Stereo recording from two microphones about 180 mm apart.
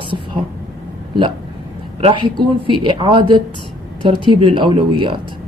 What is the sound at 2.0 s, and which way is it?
A woman's voice, 30° right (ahead or behind).